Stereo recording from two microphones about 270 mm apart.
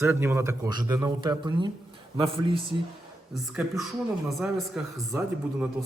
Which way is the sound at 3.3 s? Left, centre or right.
Centre.